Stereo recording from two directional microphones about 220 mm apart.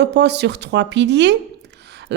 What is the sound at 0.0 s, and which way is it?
Speech, 50° right (ahead or behind).